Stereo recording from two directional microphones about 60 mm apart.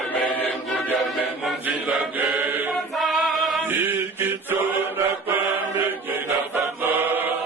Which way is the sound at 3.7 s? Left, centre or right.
Right.